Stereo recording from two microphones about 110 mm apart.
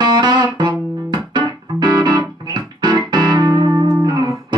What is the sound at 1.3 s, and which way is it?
Keyboard, 40° right (ahead or behind).